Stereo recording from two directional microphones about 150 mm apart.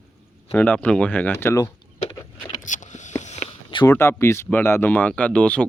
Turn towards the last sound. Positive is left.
turn(degrees=10)  # may be behind; listen again after turning